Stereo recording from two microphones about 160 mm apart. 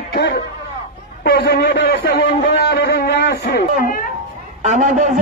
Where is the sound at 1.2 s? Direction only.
90° left.